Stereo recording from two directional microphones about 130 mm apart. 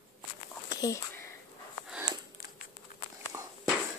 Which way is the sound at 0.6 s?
25° left (ahead or behind).